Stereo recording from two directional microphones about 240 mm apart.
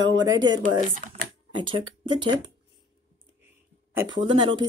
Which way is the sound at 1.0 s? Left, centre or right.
Right.